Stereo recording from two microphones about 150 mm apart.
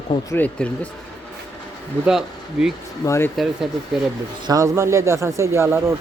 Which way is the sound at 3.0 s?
20° left (ahead or behind).